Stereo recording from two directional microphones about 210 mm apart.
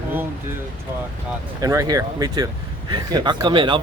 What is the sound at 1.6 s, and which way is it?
Speech, 15° right (ahead or behind).